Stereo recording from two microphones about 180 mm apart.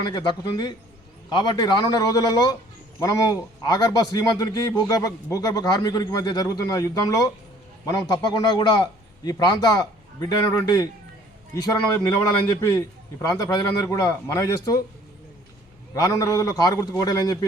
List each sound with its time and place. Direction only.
0.0 s a man's voice: 25° left (ahead or behind)
16.0 s a man's voice: 20° left (ahead or behind)